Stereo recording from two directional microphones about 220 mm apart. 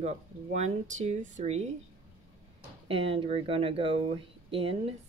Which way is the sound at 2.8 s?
25° right (ahead or behind).